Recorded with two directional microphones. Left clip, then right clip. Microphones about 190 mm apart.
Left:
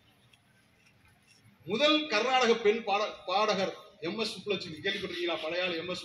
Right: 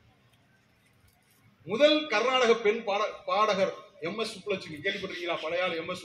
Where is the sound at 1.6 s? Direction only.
15° left (ahead or behind).